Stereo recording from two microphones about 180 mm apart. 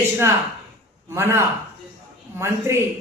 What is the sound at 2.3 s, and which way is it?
Speech, 15° right (ahead or behind).